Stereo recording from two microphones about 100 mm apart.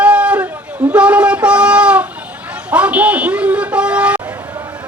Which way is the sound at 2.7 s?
10° right (ahead or behind).